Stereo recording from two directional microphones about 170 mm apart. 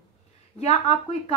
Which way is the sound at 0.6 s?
40° left (ahead or behind).